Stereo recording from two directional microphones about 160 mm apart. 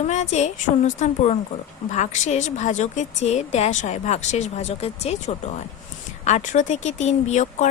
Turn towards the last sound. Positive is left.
turn(degrees=45)  # may be behind; listen again after turning